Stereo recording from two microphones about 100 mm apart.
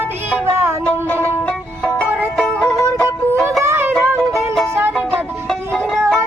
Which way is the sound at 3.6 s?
25° right (ahead or behind).